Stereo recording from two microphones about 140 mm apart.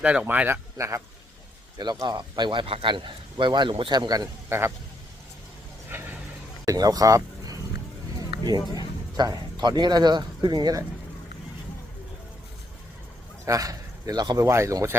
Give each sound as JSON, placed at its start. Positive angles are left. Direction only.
{"t": 0.0, "sound": "speech", "side_deg": -10}
{"t": 4.4, "sound": "a man's voice", "side_deg": -20}
{"t": 5.9, "sound": "a sound", "side_deg": -15}
{"t": 6.7, "sound": "speech", "side_deg": -25}
{"t": 13.4, "sound": "a man's voice", "side_deg": -25}